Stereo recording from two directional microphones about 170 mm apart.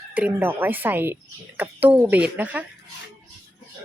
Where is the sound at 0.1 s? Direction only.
10° right (ahead or behind).